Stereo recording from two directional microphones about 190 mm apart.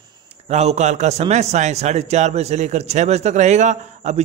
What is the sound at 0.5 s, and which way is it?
A man's voice, 35° right (ahead or behind).